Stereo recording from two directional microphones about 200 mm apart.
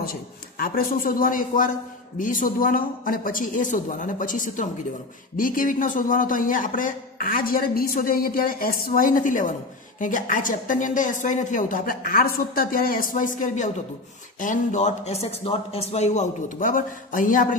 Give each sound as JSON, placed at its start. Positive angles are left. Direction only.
{"t": 0.0, "sound": "a man's voice", "side_deg": 50}